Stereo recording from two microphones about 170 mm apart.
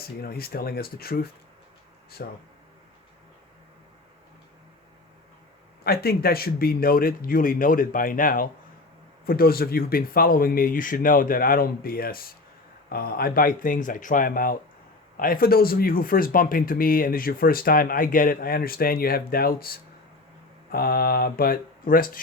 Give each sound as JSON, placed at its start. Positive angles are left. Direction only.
{"t": 0.0, "sound": "speech", "side_deg": 60}
{"t": 5.8, "sound": "speech", "side_deg": 65}